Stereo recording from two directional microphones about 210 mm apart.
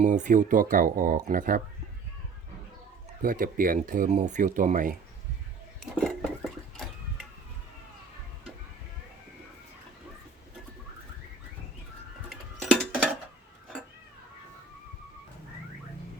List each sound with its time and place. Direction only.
0.0 s speech: 35° right (ahead or behind)
3.2 s speech: 40° right (ahead or behind)
5.8 s a sound: centre (ahead or behind)
12.3 s music: centre (ahead or behind)